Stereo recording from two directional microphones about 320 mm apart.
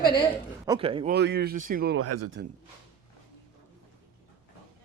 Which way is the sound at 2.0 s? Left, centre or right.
Right.